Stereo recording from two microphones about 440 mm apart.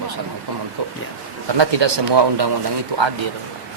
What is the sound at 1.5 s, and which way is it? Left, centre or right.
Speech, right.